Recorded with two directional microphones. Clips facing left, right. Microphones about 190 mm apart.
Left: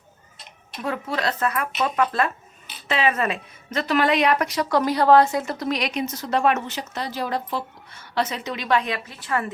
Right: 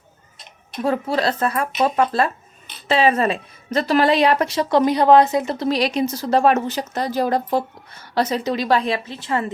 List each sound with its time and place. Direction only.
0.8 s a woman's voice: 30° right (ahead or behind)